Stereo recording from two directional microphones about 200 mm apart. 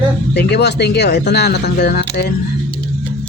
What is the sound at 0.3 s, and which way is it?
Speech, 55° left (ahead or behind).